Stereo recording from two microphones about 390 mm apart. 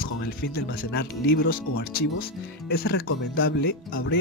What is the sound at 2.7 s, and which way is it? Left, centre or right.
Speech, left.